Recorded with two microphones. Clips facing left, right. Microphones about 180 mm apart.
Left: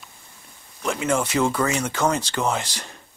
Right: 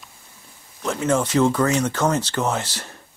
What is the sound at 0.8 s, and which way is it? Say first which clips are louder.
Speech: right 2 dB; 10° left (ahead or behind).